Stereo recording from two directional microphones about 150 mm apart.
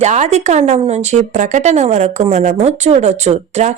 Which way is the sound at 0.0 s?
50° right (ahead or behind).